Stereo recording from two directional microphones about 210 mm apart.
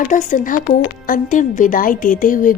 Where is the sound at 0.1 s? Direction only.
35° left (ahead or behind).